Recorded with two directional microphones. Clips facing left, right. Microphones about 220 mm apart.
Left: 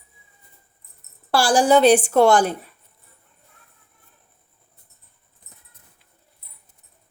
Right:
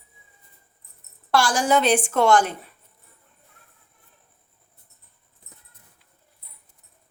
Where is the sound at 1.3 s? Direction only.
30° left (ahead or behind).